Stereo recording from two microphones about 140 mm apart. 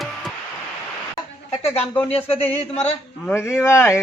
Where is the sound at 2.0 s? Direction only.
45° left (ahead or behind).